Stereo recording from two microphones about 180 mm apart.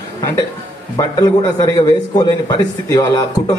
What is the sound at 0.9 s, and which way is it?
A man's voice, 20° left (ahead or behind).